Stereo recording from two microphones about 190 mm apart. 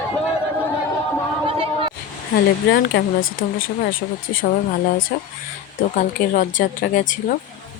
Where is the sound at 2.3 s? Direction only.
60° left (ahead or behind).